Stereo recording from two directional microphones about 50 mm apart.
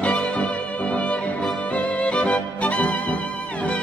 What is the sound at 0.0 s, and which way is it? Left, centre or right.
Music, left.